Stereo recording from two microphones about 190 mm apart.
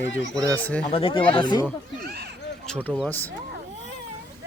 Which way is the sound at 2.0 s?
55° right (ahead or behind).